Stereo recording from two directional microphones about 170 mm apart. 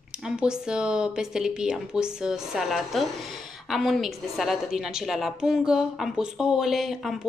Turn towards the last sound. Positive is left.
turn(degrees=0)  # may be behind; listen again after turning